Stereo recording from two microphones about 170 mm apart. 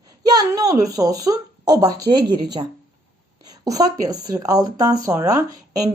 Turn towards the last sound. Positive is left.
turn(degrees=-20)  # may be behind; listen again after turning